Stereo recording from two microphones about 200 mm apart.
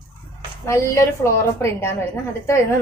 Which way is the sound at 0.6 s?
15° left (ahead or behind).